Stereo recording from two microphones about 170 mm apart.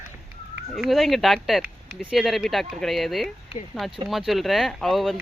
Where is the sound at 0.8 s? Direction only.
Centre (ahead or behind).